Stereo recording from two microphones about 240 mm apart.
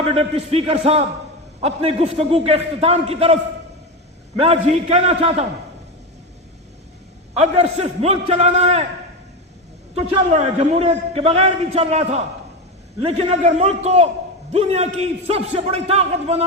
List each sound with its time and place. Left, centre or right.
0.1 s a man's voice: right
4.4 s a man's voice: right
7.3 s a man's voice: right
9.9 s a man's voice: right